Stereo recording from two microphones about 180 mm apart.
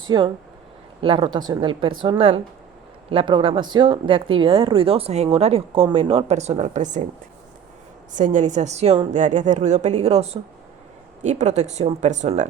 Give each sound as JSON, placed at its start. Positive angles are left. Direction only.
{"t": 0.1, "sound": "speech", "side_deg": -25}
{"t": 8.1, "sound": "speech", "side_deg": -45}